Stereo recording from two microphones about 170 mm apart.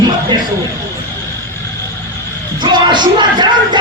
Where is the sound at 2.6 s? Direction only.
25° right (ahead or behind).